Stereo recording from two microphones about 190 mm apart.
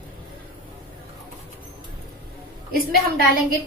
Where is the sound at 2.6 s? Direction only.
50° right (ahead or behind).